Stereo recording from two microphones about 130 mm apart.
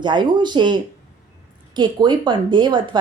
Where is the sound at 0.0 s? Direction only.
35° right (ahead or behind).